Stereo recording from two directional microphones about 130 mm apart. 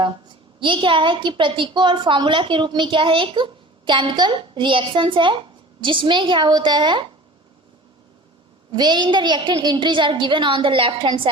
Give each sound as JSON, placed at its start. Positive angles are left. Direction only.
{"t": 0.6, "sound": "a woman's voice", "side_deg": -40}
{"t": 8.7, "sound": "a woman's voice", "side_deg": -35}